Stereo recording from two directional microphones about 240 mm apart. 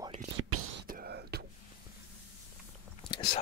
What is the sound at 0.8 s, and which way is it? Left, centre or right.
Whispering, right.